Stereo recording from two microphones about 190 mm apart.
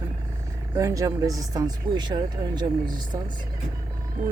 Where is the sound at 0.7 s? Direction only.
15° right (ahead or behind).